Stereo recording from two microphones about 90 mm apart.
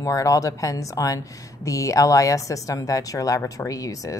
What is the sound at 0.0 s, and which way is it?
A woman's voice, 40° left (ahead or behind).